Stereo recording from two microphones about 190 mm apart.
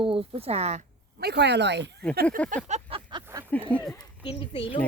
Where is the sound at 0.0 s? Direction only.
30° right (ahead or behind).